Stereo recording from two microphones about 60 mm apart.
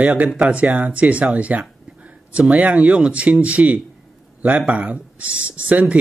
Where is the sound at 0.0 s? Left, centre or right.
Right.